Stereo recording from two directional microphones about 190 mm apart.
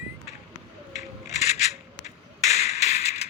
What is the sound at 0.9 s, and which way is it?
Rub, 35° left (ahead or behind).